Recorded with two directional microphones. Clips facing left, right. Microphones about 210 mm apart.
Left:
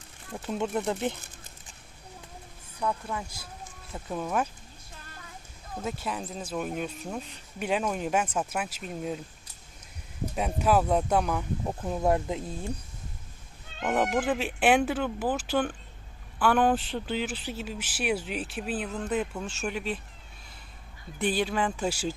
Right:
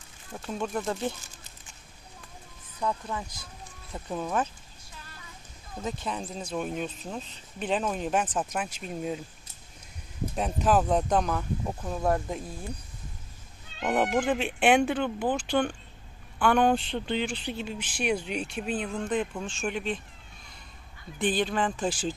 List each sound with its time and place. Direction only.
0.4 s speech: 20° left (ahead or behind)
2.8 s speech: 5° left (ahead or behind)
5.8 s speech: 5° left (ahead or behind)
10.3 s speech: 10° left (ahead or behind)
13.8 s speech: 5° right (ahead or behind)
14.1 s speech: 5° left (ahead or behind)
21.2 s speech: 10° left (ahead or behind)